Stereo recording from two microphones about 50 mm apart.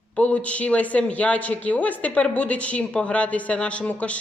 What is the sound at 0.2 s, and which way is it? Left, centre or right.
A woman's voice, left.